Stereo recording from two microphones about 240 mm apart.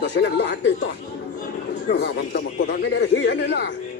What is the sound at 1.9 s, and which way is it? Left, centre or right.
A man's voice, left.